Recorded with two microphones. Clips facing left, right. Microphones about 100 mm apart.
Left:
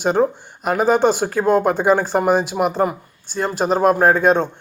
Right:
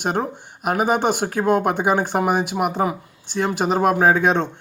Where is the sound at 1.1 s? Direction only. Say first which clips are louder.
Left 2 dB; 60° right (ahead or behind).